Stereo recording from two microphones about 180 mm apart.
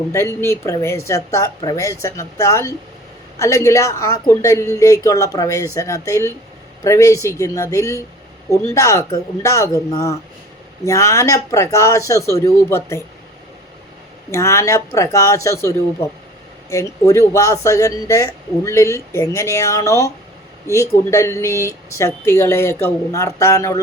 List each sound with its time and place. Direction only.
0.1 s speech: 15° left (ahead or behind)
14.3 s speech: 15° left (ahead or behind)